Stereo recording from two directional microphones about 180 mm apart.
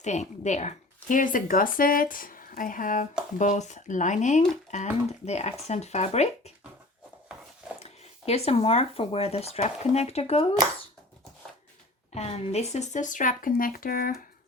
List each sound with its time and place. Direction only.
0.0 s speech: 40° left (ahead or behind)
7.8 s speech: 35° left (ahead or behind)
12.1 s speech: 35° left (ahead or behind); by 14.2 s 55° left (ahead or behind)